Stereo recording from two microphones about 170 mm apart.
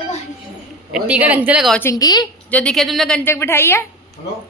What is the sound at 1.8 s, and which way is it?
Speech, 20° left (ahead or behind).